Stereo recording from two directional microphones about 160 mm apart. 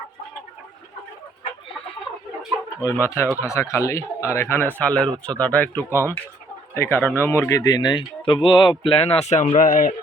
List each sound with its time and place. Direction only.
2.9 s speech: 15° left (ahead or behind); by 9.9 s 60° left (ahead or behind)